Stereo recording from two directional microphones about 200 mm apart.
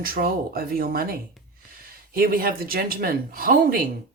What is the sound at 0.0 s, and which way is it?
Speech, 45° right (ahead or behind).